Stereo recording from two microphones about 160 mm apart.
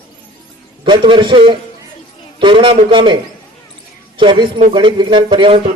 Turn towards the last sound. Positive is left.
turn(degrees=-30)  # may be behind; listen again after turning